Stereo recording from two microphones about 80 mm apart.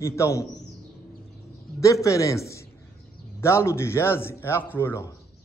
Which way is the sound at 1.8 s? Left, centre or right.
Left.